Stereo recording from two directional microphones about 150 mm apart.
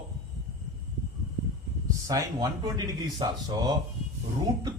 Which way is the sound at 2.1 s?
25° right (ahead or behind).